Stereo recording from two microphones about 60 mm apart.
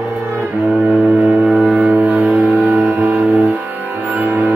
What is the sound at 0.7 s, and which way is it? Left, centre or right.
Music, right.